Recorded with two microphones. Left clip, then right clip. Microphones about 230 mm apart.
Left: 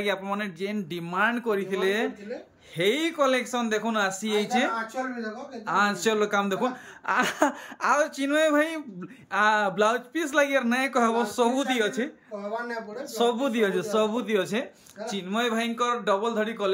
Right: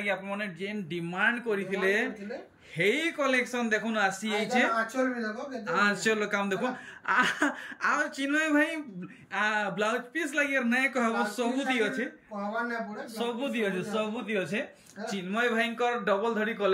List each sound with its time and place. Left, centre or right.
0.0 s speech: centre
13.2 s speech: centre